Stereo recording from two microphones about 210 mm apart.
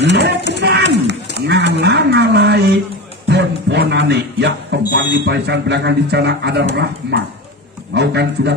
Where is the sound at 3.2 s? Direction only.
55° right (ahead or behind).